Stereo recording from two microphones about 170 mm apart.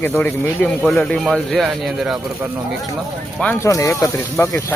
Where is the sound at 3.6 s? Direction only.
20° left (ahead or behind).